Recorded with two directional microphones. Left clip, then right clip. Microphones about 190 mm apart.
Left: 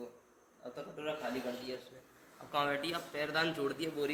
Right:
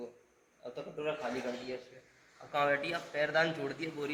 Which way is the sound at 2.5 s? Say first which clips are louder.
Right 3 dB; 10° left (ahead or behind).